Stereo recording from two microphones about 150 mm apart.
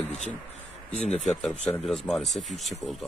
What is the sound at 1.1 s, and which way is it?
Speech, 50° left (ahead or behind).